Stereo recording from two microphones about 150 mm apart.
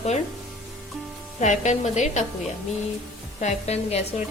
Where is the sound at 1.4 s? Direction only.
55° left (ahead or behind).